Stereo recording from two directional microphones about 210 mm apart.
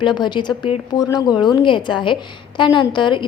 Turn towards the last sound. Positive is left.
turn(degrees=20)  # may be behind; listen again after turning